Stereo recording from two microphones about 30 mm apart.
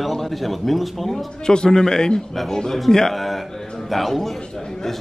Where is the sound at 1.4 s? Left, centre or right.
Left.